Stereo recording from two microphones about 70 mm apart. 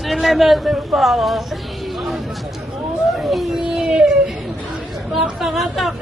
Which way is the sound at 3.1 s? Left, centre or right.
Centre.